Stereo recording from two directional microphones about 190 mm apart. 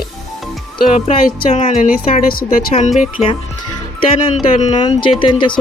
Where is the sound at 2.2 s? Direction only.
50° left (ahead or behind).